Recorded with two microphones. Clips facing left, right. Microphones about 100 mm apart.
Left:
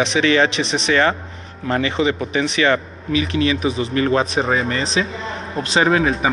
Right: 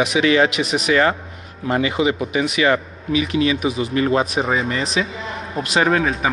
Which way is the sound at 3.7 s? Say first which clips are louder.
Left 1 dB; 30° left (ahead or behind).